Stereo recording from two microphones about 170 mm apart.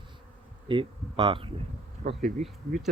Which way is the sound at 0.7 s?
30° right (ahead or behind).